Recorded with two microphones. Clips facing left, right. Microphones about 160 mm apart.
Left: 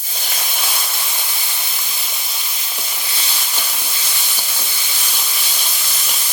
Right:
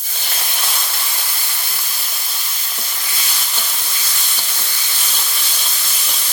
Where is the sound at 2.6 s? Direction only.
10° left (ahead or behind).